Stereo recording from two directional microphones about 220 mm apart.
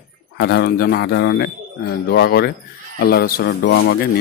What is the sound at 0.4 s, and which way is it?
Speech, 45° left (ahead or behind).